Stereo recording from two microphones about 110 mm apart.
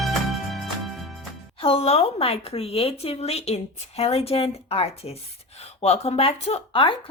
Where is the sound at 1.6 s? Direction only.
60° left (ahead or behind).